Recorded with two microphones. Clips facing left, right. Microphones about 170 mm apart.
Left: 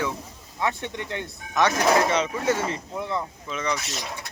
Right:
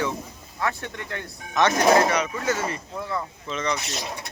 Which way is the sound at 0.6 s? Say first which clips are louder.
Left 1 dB; 20° left (ahead or behind).